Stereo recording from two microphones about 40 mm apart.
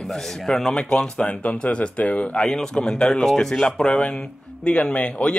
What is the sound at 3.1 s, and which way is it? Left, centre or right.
Speech, centre.